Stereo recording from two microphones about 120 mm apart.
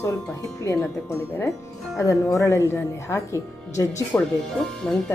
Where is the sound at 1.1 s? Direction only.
20° left (ahead or behind).